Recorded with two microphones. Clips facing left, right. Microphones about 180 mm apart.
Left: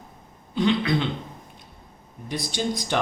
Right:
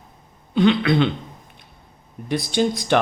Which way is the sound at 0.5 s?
70° right (ahead or behind).